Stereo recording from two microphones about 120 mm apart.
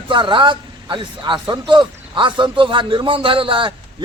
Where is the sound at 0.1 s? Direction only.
40° right (ahead or behind).